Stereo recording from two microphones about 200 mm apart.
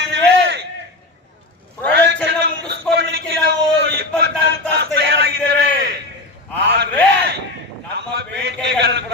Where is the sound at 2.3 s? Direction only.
60° right (ahead or behind).